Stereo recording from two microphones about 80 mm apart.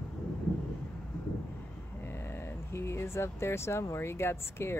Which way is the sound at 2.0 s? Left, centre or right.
Left.